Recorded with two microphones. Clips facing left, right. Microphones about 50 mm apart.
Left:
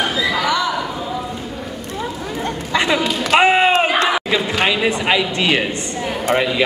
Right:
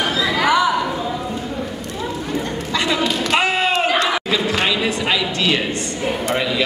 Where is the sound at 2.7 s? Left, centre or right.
Left.